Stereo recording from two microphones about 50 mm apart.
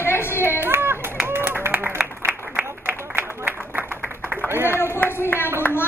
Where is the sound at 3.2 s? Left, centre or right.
Right.